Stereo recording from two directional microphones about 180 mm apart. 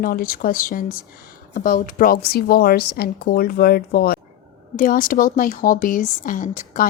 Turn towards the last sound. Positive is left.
turn(degrees=45)  # may be behind; listen again after turning